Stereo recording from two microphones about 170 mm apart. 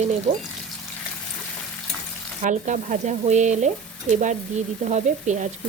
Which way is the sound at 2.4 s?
45° right (ahead or behind).